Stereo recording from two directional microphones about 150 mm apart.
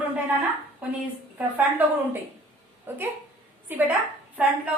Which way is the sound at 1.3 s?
10° right (ahead or behind).